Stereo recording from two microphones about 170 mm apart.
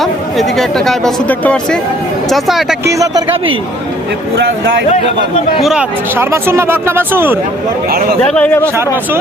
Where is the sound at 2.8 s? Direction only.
20° right (ahead or behind).